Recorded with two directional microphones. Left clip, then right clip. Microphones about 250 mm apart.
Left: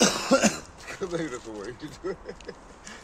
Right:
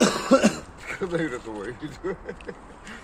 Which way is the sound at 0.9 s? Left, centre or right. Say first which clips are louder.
Right 4 dB; centre.